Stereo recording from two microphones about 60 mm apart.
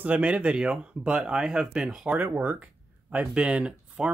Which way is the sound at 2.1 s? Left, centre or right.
Right.